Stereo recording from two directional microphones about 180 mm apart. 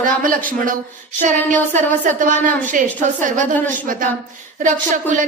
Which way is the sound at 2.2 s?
45° right (ahead or behind).